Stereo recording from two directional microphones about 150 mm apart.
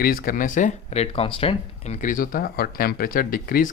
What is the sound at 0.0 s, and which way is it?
Speech, 70° left (ahead or behind).